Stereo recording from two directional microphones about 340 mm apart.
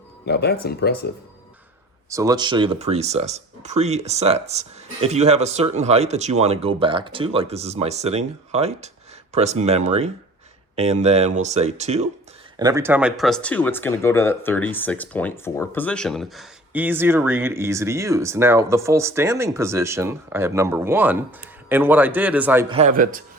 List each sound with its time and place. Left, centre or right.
0.3 s speech: left
2.0 s a man's voice: centre
22.7 s speech: right